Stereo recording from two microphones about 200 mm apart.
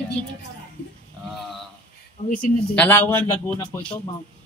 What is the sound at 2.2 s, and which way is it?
Speech, 45° left (ahead or behind).